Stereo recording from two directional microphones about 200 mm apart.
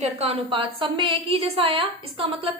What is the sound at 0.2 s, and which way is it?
A woman's voice, 25° right (ahead or behind).